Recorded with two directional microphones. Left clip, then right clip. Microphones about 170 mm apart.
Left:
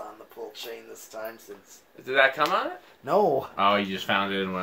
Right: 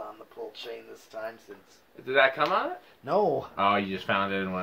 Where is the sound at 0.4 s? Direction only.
15° left (ahead or behind).